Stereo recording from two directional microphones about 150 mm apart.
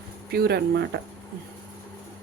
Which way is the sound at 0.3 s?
90° right.